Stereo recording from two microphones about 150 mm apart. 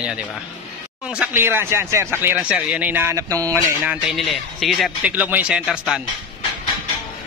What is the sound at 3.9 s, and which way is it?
Speech, centre (ahead or behind).